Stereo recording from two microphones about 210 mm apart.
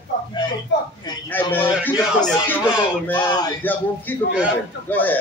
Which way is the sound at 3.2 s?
20° left (ahead or behind).